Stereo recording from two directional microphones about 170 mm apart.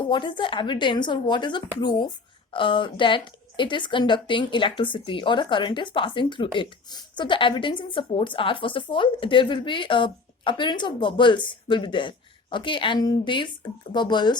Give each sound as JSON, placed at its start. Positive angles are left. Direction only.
{"t": 0.1, "sound": "speech", "side_deg": 30}